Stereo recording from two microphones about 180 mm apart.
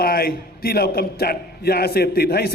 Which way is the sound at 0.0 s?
55° left (ahead or behind).